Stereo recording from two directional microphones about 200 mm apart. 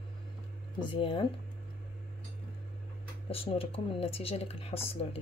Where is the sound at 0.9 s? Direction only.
25° left (ahead or behind).